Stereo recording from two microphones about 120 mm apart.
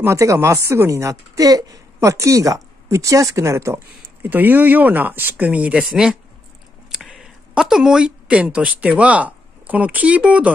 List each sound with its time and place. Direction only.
0.0 s speech: 25° right (ahead or behind)